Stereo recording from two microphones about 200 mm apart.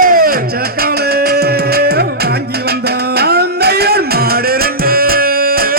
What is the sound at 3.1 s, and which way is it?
Music, 55° right (ahead or behind).